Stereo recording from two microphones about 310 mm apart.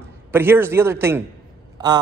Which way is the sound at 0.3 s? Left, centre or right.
Centre.